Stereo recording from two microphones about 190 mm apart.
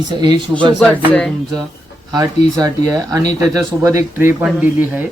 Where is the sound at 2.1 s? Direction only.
20° right (ahead or behind).